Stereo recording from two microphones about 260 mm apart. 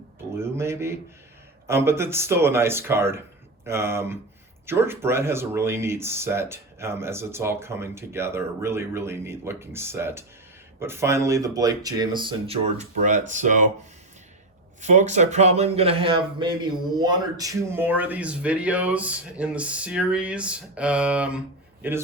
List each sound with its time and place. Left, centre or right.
0.3 s speech: centre; by 13.6 s right
14.8 s a man's voice: right; by 22.0 s centre